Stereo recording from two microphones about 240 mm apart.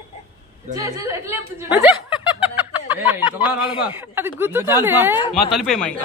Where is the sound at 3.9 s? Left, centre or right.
Centre.